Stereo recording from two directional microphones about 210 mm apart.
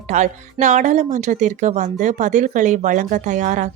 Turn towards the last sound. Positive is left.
turn(degrees=-35)  # may be behind; listen again after turning